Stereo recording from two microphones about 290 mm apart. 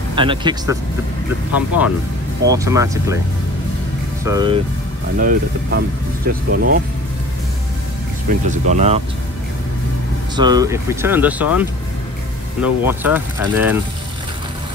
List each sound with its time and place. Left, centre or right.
0.1 s speech: centre
2.4 s speech: centre
4.2 s speech: centre
5.2 s speech: right
8.3 s speech: right
10.3 s speech: centre
12.6 s speech: centre